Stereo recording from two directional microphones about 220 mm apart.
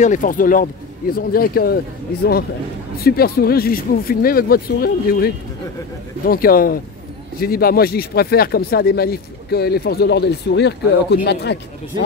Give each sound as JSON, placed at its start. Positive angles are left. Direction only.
{"t": 0.0, "sound": "speech", "side_deg": 35}
{"t": 3.0, "sound": "speech", "side_deg": 45}